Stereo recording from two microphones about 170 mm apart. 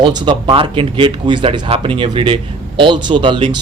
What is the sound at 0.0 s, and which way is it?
A man's voice, 25° right (ahead or behind).